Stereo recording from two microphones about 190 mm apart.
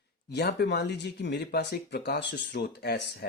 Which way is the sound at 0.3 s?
60° left (ahead or behind).